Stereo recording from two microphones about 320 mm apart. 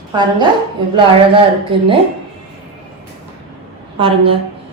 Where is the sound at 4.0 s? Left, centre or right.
Centre.